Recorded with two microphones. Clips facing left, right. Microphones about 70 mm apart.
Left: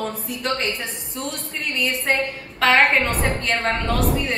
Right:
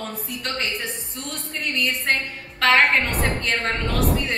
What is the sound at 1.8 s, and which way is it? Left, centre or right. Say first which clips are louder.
A woman's voice: left 2 dB; centre.